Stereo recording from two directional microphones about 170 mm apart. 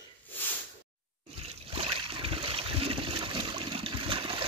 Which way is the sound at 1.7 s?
35° right (ahead or behind).